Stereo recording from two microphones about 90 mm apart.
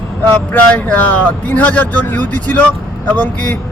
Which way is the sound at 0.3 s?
20° left (ahead or behind).